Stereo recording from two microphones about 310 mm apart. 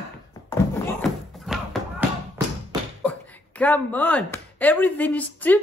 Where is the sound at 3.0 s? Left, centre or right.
Centre.